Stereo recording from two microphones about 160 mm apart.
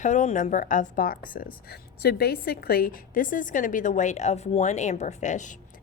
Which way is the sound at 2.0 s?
85° left.